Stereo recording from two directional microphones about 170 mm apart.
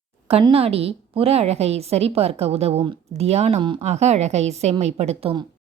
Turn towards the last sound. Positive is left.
turn(degrees=-35)  # may be behind; listen again after turning